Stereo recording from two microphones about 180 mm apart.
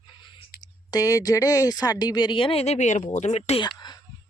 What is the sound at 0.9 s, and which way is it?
Speech, 20° left (ahead or behind).